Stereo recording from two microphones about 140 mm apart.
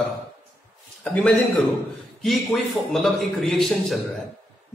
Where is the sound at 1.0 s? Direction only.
10° left (ahead or behind).